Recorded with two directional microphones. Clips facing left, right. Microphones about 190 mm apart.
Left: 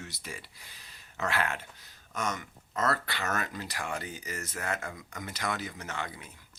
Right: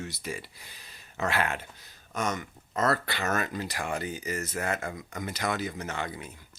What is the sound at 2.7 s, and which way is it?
Speech, 30° right (ahead or behind).